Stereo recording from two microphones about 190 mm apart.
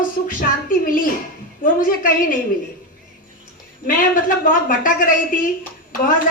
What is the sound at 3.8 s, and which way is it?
A woman's voice, 45° left (ahead or behind).